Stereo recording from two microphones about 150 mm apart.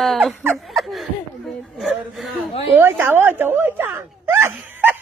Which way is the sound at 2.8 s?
10° right (ahead or behind).